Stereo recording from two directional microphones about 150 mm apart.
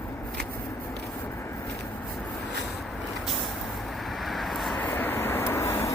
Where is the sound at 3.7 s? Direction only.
Centre (ahead or behind).